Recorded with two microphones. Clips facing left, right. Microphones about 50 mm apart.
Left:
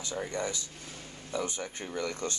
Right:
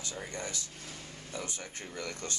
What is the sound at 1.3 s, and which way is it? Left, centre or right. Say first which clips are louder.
Speech: left 7 dB; left.